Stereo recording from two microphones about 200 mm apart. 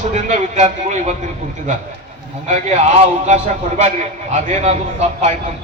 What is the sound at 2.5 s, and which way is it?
A man's voice, 35° right (ahead or behind).